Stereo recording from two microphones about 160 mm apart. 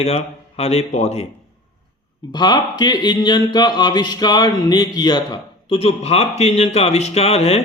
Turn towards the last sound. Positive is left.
turn(degrees=40)  # may be behind; listen again after turning